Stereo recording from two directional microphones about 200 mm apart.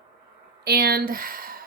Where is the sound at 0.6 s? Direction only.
50° right (ahead or behind).